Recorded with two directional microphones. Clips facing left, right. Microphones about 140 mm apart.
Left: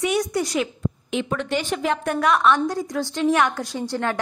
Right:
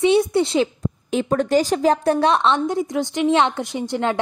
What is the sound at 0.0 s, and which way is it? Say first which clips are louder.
Speech: right 6 dB; 25° right (ahead or behind).